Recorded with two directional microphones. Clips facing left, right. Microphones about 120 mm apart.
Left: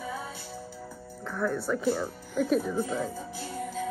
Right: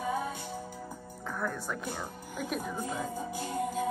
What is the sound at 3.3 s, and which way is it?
Music, 50° right (ahead or behind).